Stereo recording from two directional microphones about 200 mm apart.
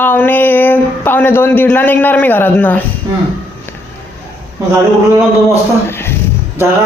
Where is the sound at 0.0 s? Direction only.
10° left (ahead or behind).